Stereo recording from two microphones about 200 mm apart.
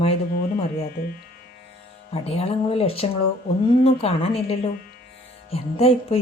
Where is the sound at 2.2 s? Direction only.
30° left (ahead or behind).